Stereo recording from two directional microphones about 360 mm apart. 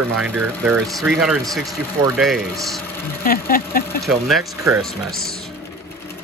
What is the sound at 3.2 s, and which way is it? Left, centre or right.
Speech, left.